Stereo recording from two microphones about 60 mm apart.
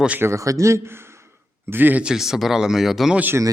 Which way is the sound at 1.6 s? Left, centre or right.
Right.